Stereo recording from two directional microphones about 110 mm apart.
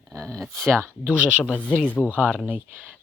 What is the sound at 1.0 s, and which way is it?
Speech, 10° right (ahead or behind).